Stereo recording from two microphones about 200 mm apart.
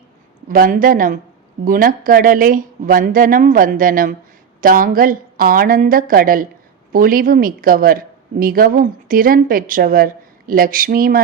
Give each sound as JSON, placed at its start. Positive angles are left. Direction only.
{"t": 0.4, "sound": "a woman's voice", "side_deg": -45}